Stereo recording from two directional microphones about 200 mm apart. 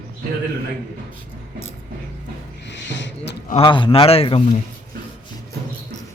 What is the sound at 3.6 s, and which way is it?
Speech, 25° left (ahead or behind).